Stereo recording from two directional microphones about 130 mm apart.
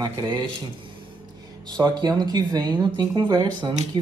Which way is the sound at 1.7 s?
30° right (ahead or behind).